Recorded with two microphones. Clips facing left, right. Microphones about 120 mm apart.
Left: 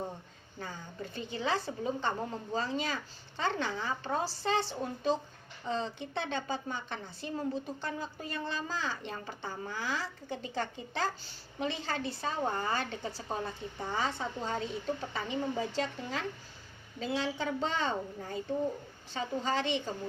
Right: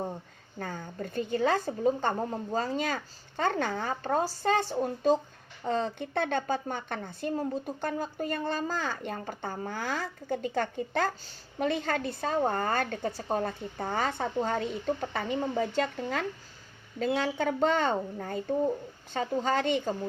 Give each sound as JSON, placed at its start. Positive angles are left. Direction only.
{"t": 0.6, "sound": "a woman's voice", "side_deg": -50}